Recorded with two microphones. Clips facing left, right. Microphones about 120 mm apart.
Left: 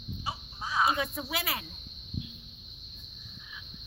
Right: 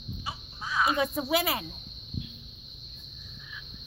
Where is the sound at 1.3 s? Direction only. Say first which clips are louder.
Right 8 dB; 20° right (ahead or behind).